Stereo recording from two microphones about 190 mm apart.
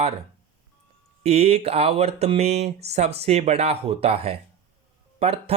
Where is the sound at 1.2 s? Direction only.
35° right (ahead or behind).